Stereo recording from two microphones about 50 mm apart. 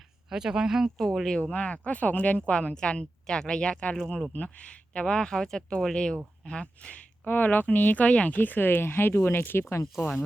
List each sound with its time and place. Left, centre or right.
0.3 s speech: centre
0.9 s speech: centre
1.4 s speech: left
7.3 s speech: left
8.0 s speech: left
8.4 s speech: left